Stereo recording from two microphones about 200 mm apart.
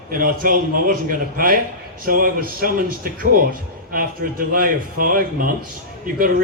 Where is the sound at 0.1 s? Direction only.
45° right (ahead or behind).